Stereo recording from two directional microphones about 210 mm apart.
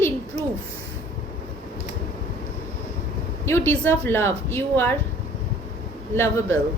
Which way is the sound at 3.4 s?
10° left (ahead or behind).